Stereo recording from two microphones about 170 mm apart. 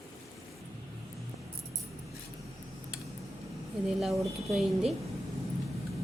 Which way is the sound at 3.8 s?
Centre (ahead or behind).